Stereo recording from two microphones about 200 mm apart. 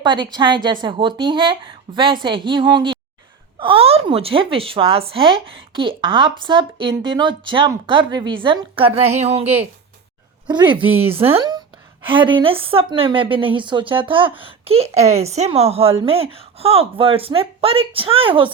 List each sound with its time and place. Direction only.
0.0 s a woman's voice: 25° right (ahead or behind)
10.8 s a woman's voice: 10° right (ahead or behind)
11.1 s speech: 30° right (ahead or behind)